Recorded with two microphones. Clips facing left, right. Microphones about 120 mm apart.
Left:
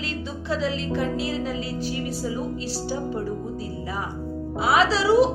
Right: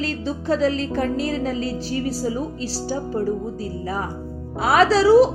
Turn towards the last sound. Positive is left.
turn(degrees=-40)  # may be behind; listen again after turning